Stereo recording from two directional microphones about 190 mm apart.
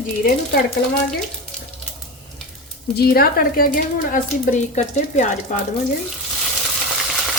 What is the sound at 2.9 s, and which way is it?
A woman's voice, 55° left (ahead or behind).